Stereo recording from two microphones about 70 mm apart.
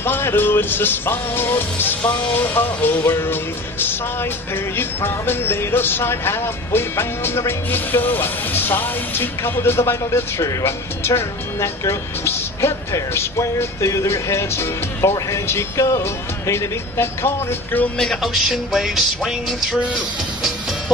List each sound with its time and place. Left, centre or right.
0.0 s speech: left
4.7 s speech: left
17.9 s music: centre